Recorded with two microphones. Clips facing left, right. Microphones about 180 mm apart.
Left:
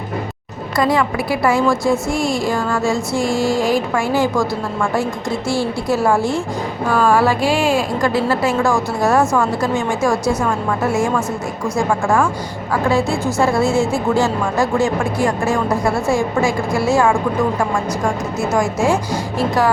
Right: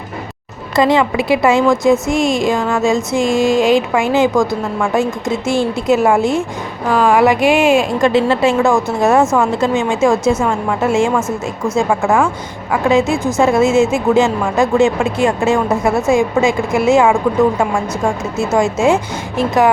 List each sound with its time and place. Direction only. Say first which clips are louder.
0.8 s a woman's voice: right 4 dB; 25° right (ahead or behind)